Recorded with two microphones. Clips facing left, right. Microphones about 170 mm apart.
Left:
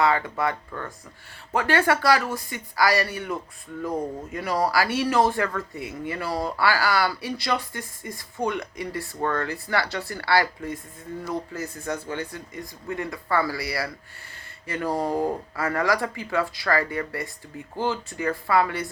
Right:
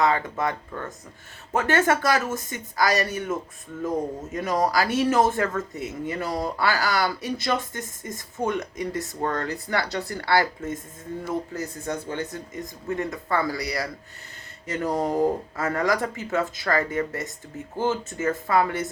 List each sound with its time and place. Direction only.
0.0 s speech: 20° right (ahead or behind)
11.9 s speech: 25° right (ahead or behind)